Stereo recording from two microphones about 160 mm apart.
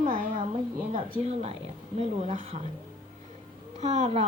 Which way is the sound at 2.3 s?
50° right (ahead or behind).